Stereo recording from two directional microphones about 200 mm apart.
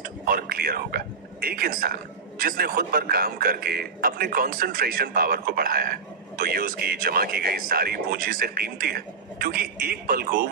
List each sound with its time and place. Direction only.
0.0 s a man's voice: 50° right (ahead or behind)